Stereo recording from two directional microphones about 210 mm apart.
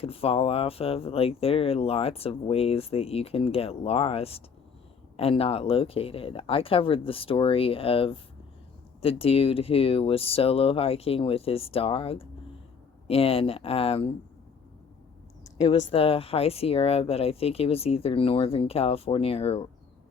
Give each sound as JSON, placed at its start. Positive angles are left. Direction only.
{"t": 0.0, "sound": "speech", "side_deg": 25}
{"t": 15.9, "sound": "speech", "side_deg": 25}